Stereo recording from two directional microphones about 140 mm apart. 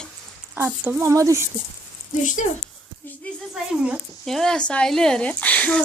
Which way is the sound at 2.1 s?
65° left (ahead or behind).